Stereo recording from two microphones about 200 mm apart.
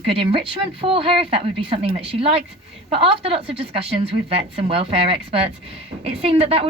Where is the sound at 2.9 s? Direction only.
25° right (ahead or behind).